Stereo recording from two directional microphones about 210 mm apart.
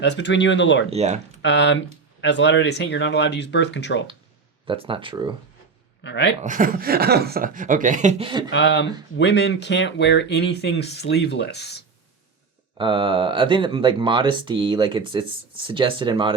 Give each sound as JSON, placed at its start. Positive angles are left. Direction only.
{"t": 0.0, "sound": "speech", "side_deg": 55}
{"t": 0.9, "sound": "speech", "side_deg": -30}
{"t": 1.4, "sound": "speech", "side_deg": 55}
{"t": 4.6, "sound": "speech", "side_deg": -25}
{"t": 6.0, "sound": "a man's voice", "side_deg": 55}
{"t": 6.4, "sound": "speech", "side_deg": -40}
{"t": 8.2, "sound": "speech", "side_deg": -20}
{"t": 8.4, "sound": "speech", "side_deg": 55}
{"t": 12.7, "sound": "speech", "side_deg": -25}